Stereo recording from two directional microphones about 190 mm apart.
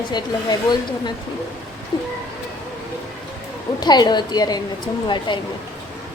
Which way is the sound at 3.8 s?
20° left (ahead or behind).